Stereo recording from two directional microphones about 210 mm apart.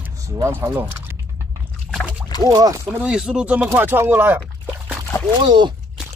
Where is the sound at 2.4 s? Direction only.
15° right (ahead or behind).